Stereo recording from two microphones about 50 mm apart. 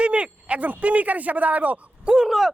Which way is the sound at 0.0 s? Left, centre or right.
Right.